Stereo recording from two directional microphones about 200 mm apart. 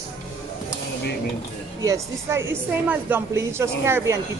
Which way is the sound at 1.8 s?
15° right (ahead or behind).